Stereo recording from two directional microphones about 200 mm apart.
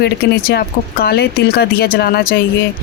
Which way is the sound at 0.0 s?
55° left (ahead or behind).